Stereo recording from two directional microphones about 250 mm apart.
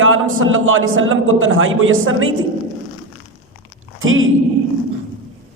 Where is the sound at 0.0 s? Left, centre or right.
Right.